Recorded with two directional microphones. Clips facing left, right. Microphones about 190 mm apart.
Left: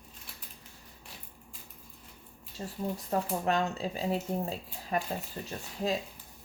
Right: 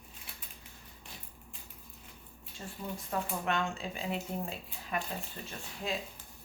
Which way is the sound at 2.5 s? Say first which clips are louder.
Left 6 dB; 35° left (ahead or behind).